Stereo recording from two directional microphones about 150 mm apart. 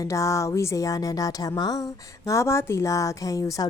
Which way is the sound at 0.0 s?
20° left (ahead or behind).